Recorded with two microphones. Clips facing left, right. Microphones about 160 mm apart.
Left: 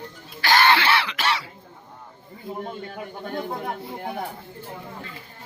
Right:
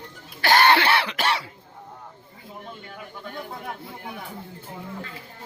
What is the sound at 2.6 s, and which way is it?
Speech, 50° left (ahead or behind).